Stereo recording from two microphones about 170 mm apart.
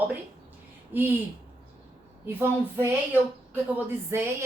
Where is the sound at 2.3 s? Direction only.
15° right (ahead or behind).